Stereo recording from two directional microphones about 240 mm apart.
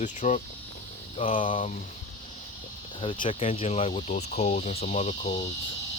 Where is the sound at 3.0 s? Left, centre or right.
Left.